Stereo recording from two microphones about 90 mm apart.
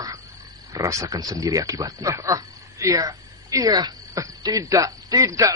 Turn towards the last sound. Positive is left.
turn(degrees=-35)  # may be behind; listen again after turning